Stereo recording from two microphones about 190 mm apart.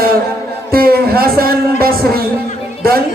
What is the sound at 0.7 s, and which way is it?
Speech, 55° right (ahead or behind).